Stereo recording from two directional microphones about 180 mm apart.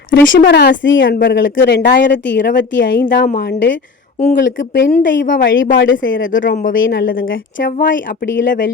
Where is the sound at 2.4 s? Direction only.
45° left (ahead or behind).